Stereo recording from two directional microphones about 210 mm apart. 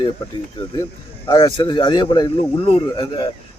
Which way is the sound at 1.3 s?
25° left (ahead or behind).